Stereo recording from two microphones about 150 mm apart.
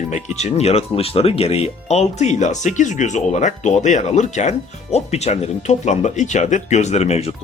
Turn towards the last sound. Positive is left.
turn(degrees=45)  # may be behind; listen again after turning